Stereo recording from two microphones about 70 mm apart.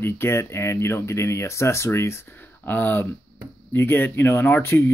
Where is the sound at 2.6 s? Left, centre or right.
Left.